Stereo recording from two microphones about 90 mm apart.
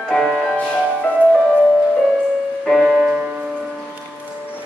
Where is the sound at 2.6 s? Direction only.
5° right (ahead or behind).